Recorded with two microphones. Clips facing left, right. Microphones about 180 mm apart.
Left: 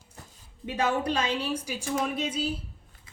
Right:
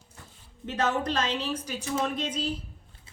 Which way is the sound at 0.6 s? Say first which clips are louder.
Left 1 dB; 10° left (ahead or behind).